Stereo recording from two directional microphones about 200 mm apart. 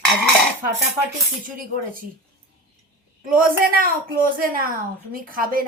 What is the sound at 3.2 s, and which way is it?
Speech, 45° right (ahead or behind).